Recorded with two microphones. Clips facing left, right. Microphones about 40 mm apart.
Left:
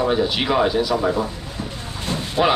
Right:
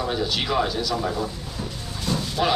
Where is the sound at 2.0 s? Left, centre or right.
Left.